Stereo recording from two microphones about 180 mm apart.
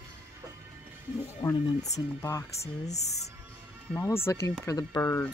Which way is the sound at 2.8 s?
40° left (ahead or behind).